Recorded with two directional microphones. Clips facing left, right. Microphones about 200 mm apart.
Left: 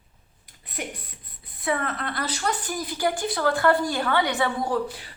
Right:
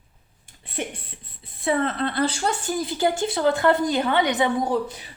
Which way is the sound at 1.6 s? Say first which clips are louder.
Right 5 dB; 25° right (ahead or behind).